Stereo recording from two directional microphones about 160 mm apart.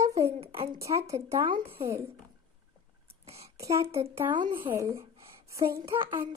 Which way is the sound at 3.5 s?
20° right (ahead or behind).